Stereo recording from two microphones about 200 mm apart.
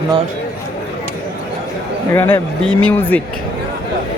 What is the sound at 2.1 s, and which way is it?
Speech, 10° left (ahead or behind).